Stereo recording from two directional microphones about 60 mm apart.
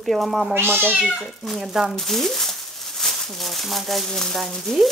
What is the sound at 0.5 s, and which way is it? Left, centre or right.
Cat, right.